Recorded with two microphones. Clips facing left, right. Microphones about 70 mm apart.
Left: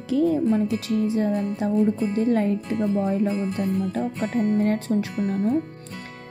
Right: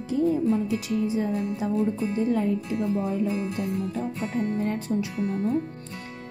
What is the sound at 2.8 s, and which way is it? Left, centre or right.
Music, left.